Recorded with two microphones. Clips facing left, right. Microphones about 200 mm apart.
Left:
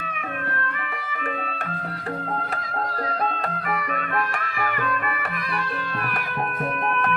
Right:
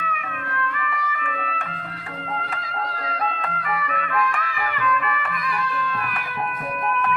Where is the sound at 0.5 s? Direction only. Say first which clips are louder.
Right 3 dB; 50° left (ahead or behind).